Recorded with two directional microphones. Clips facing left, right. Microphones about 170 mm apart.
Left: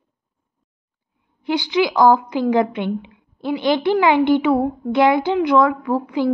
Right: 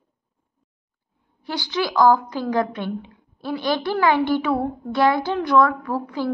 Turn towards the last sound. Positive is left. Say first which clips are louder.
# left 5 dB
turn(degrees=20)  # may be behind; listen again after turning